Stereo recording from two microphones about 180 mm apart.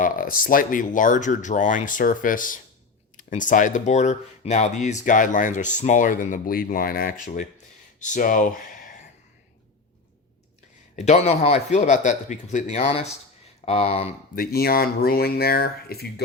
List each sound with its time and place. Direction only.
0.0 s speech: 50° left (ahead or behind)
10.9 s a man's voice: 40° left (ahead or behind)
14.3 s speech: 55° left (ahead or behind)